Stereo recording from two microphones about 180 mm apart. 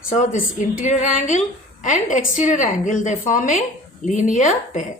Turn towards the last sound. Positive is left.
turn(degrees=45)  # may be behind; listen again after turning